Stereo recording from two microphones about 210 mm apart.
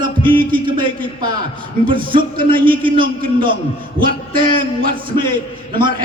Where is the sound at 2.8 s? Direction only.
25° right (ahead or behind).